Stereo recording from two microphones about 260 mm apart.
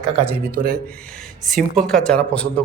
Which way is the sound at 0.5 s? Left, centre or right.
Right.